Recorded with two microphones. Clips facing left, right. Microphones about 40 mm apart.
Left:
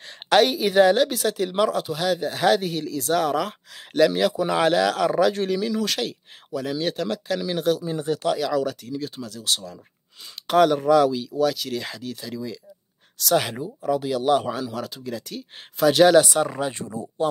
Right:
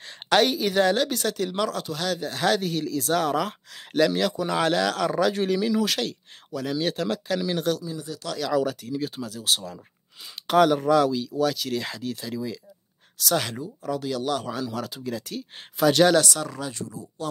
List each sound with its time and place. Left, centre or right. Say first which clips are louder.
0.0 s speech: left 3 dB; centre
7.8 s speech: left 8 dB; left
8.4 s speech: left 1 dB; centre
13.5 s speech: left 5 dB; centre
14.6 s speech: even; centre
16.2 s speech: left 6 dB; left